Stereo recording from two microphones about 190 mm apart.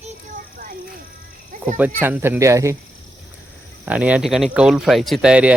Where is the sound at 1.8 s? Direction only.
10° right (ahead or behind).